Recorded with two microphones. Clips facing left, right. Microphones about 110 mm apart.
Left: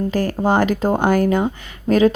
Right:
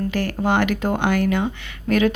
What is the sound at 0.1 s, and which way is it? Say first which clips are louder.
Speech: left 3 dB; 35° left (ahead or behind).